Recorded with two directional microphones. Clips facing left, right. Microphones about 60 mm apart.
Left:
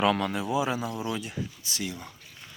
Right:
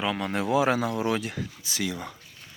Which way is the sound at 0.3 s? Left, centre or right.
Right.